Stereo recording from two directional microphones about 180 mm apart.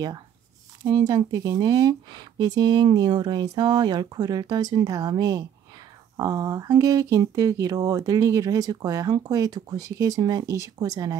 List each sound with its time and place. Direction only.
0.8 s speech: 20° right (ahead or behind)